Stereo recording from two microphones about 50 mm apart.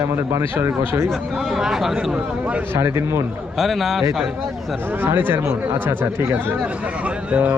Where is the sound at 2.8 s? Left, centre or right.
Right.